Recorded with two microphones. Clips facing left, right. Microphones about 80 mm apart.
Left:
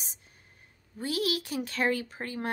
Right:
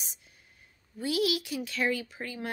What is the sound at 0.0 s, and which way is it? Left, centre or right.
A woman's voice, left.